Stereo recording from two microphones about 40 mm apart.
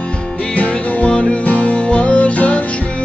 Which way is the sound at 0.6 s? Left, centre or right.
Left.